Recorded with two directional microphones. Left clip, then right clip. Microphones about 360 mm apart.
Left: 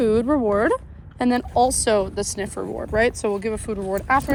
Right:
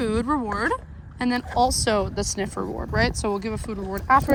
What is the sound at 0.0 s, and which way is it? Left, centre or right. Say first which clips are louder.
Speech: left 5 dB; centre.